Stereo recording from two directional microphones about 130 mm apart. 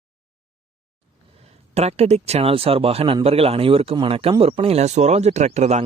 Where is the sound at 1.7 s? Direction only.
55° right (ahead or behind).